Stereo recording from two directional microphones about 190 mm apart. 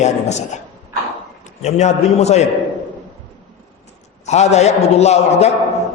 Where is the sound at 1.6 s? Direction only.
35° left (ahead or behind).